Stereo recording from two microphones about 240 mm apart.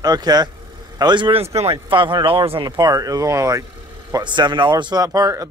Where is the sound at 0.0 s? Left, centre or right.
Centre.